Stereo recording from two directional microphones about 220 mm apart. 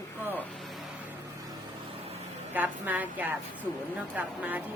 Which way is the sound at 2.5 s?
10° right (ahead or behind).